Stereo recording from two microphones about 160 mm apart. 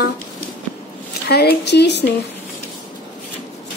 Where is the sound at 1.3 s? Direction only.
90° left.